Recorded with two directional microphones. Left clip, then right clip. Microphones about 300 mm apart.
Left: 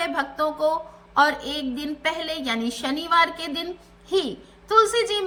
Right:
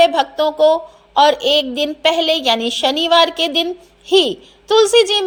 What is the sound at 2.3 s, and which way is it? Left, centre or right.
Speech, right.